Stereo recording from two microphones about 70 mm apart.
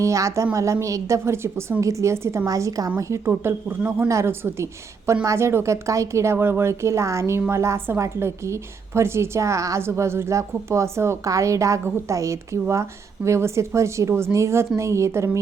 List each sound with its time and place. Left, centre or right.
0.0 s a woman's voice: right
2.5 s a woman's voice: right
3.0 s a woman's voice: right